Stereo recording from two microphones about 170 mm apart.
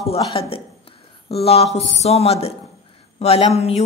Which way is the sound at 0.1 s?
35° left (ahead or behind).